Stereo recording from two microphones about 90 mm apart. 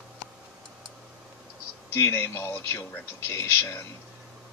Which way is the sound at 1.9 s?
30° left (ahead or behind).